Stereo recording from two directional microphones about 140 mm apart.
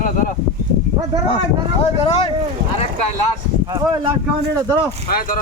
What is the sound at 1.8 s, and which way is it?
Speech, 45° left (ahead or behind).